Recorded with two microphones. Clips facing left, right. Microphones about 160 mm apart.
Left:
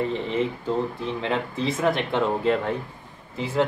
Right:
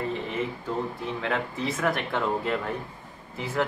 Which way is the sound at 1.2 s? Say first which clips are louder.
Left 3 dB; 25° left (ahead or behind).